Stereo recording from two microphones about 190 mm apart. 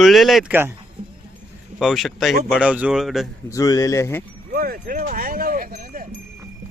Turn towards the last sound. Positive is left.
turn(degrees=-50)  # may be behind; listen again after turning